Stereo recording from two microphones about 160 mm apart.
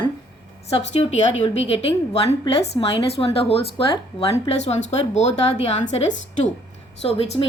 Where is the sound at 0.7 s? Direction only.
40° left (ahead or behind).